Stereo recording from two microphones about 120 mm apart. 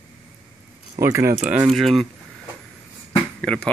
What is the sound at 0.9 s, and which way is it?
Speech, 25° right (ahead or behind).